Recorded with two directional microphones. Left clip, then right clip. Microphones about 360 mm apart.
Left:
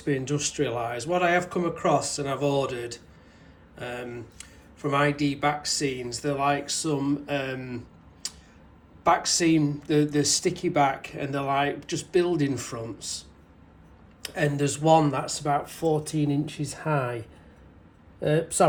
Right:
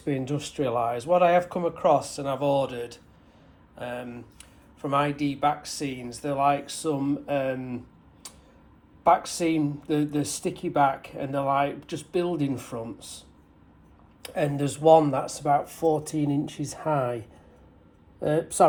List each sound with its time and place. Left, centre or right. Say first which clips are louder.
0.0 s speech: left 2 dB; centre
9.0 s speech: even; centre
18.3 s speech: even; centre